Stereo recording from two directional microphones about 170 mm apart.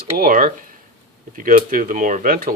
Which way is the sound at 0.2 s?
55° right (ahead or behind).